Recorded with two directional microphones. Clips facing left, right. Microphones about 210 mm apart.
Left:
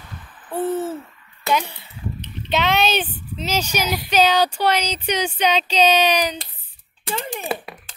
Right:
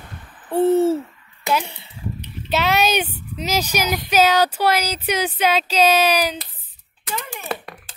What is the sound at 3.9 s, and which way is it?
Speech, 5° right (ahead or behind).